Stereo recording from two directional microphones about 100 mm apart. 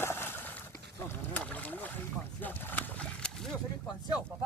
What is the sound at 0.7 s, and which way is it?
Boat, 25° left (ahead or behind).